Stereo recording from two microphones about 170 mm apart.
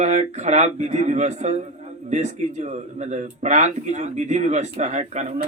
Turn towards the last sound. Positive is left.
turn(degrees=-45)  # may be behind; listen again after turning